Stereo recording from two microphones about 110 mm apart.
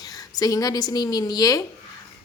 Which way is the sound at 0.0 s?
35° left (ahead or behind).